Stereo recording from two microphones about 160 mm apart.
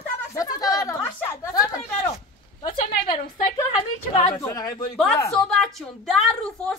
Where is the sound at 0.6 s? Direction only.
20° left (ahead or behind).